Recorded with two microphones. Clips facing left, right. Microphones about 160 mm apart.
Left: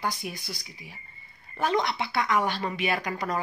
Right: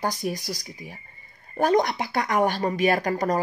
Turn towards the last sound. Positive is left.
turn(degrees=-45)  # may be behind; listen again after turning